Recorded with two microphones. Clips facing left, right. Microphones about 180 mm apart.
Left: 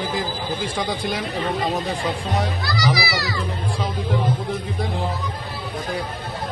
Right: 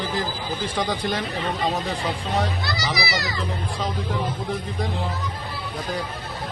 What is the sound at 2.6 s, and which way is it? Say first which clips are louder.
Children playing: left 4 dB; 25° right (ahead or behind).